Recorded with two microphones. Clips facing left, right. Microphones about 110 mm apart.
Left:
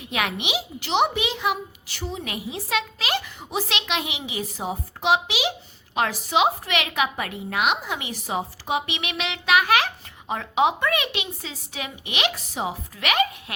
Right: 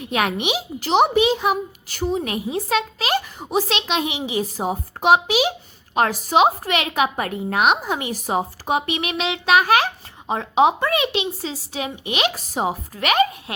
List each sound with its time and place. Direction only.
0.1 s speech: 40° right (ahead or behind)